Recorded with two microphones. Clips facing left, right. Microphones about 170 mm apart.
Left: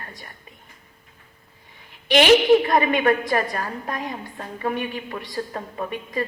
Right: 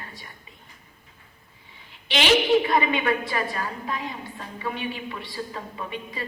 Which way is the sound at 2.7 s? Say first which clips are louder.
Left 4 dB; 45° left (ahead or behind).